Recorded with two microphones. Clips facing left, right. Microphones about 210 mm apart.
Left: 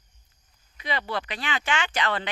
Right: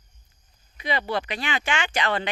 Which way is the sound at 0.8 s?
15° right (ahead or behind).